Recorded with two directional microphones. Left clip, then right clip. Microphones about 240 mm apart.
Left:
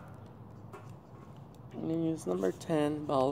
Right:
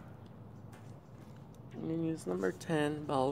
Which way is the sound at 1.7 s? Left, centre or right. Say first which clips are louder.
Left 3 dB; centre.